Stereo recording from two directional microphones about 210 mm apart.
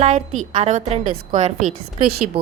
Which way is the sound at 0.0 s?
35° right (ahead or behind).